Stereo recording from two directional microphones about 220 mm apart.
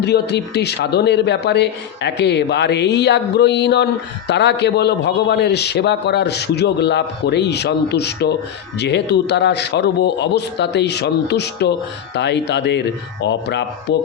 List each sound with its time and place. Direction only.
0.0 s a man's voice: 50° left (ahead or behind)